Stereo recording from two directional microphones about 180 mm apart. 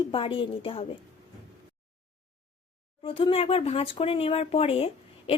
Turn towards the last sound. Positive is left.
turn(degrees=35)  # may be behind; listen again after turning